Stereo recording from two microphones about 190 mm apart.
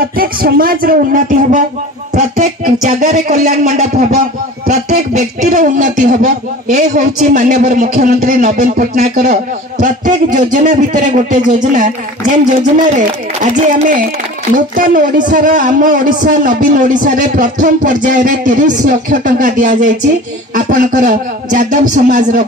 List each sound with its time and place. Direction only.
0.2 s speech: 50° right (ahead or behind)